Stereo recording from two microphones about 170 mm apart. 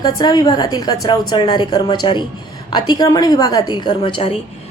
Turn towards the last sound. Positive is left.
turn(degrees=30)  # may be behind; listen again after turning